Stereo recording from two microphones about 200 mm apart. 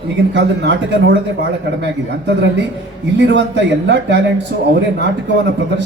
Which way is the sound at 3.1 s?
60° right (ahead or behind).